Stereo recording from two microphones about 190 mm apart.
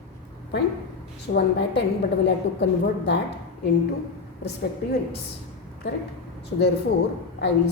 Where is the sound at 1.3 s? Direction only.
75° left (ahead or behind).